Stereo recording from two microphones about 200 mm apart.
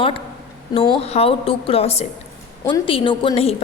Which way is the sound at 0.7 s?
25° left (ahead or behind).